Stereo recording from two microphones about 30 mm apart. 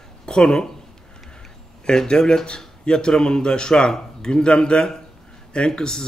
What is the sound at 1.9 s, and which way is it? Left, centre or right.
Speech, left.